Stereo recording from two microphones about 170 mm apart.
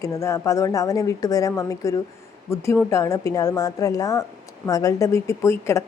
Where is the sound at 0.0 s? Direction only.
20° left (ahead or behind).